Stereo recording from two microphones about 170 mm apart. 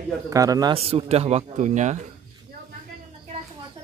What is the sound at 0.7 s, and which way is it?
Speech, 35° right (ahead or behind).